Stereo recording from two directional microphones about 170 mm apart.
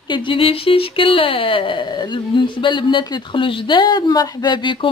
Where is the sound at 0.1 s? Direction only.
30° left (ahead or behind).